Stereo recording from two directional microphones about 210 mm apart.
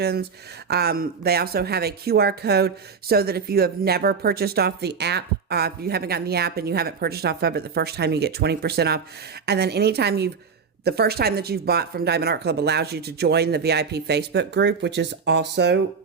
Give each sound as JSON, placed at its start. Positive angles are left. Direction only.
{"t": 0.0, "sound": "speech", "side_deg": -50}